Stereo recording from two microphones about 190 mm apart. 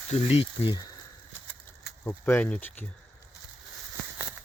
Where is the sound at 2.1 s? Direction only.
10° left (ahead or behind).